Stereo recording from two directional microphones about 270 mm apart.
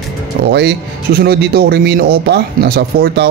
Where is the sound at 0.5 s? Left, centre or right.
Right.